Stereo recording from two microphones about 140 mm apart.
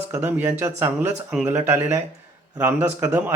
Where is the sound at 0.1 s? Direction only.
15° right (ahead or behind).